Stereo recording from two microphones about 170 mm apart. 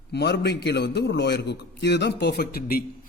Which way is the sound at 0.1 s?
80° left.